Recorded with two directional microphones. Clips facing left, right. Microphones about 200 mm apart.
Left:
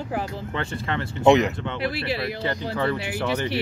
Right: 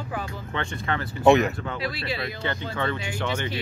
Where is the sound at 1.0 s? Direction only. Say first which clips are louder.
Left 1 dB; 20° left (ahead or behind).